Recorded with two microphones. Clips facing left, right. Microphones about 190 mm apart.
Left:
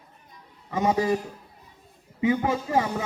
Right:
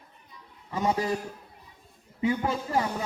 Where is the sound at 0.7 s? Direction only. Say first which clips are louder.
Left 3 dB; 20° left (ahead or behind).